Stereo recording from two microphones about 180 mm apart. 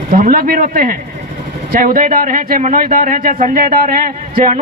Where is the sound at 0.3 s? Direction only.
50° right (ahead or behind).